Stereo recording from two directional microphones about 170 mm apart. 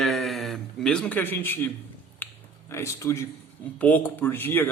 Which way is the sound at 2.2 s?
10° left (ahead or behind).